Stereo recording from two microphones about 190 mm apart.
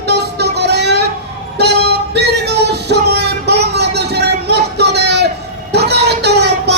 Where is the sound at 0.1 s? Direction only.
60° right (ahead or behind).